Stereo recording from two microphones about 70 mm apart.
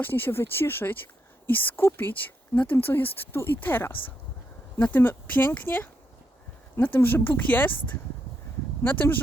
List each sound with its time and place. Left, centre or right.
0.0 s speech: left